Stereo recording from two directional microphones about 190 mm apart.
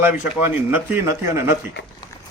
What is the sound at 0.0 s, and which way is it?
A man's voice, 10° right (ahead or behind).